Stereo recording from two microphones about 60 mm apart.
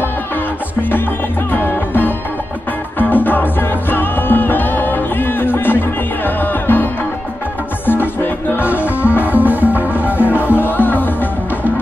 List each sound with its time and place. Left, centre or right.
1.5 s music: left
9.2 s music: right
10.6 s music: left